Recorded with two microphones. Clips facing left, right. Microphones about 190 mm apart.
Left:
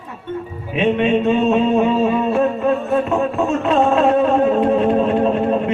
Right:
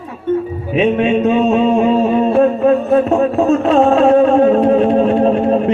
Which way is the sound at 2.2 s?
35° right (ahead or behind).